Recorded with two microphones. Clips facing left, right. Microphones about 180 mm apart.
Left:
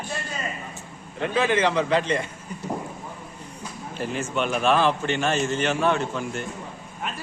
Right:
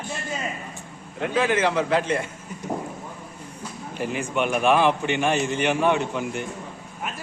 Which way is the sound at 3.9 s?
15° right (ahead or behind).